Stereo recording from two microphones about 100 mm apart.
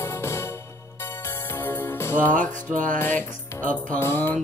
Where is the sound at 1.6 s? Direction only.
20° left (ahead or behind).